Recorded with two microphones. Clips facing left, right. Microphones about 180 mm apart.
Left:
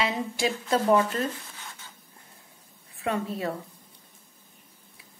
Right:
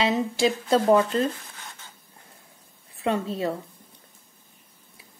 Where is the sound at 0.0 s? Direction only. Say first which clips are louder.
Right 5 dB; 30° right (ahead or behind).